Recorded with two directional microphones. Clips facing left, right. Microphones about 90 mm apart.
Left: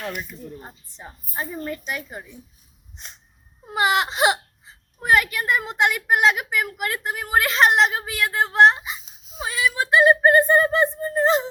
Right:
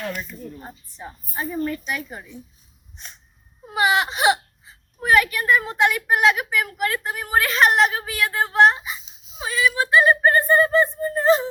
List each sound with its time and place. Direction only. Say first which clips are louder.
0.1 s a woman's voice: right 1 dB; 10° left (ahead or behind)
0.6 s speech: right 3 dB; 25° left (ahead or behind)
3.8 s speech: even; 30° left (ahead or behind)
9.4 s a sound: right 2 dB; 30° left (ahead or behind)